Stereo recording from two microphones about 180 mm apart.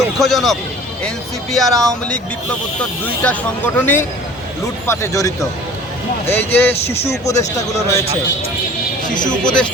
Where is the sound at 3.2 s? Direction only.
10° left (ahead or behind).